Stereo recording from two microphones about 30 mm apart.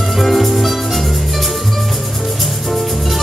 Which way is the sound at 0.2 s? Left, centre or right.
Centre.